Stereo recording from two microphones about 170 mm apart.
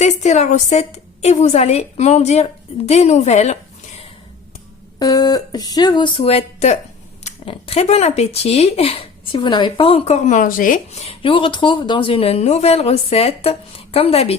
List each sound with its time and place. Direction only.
0.0 s speech: 40° left (ahead or behind)
4.9 s speech: 20° left (ahead or behind)